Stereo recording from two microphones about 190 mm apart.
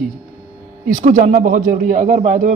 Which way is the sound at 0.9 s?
40° right (ahead or behind).